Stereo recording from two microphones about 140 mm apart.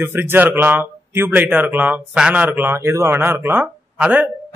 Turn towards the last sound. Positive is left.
turn(degrees=-10)  # may be behind; listen again after turning